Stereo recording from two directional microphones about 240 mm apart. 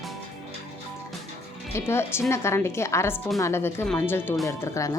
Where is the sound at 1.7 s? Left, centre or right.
Centre.